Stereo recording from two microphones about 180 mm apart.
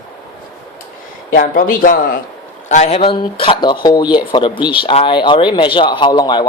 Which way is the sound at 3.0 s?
30° left (ahead or behind).